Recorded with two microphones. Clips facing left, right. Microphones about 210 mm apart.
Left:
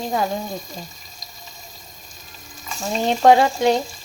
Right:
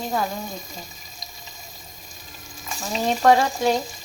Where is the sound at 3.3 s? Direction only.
20° left (ahead or behind).